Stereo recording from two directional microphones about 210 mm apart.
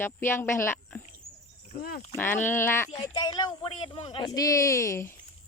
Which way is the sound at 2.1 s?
10° left (ahead or behind).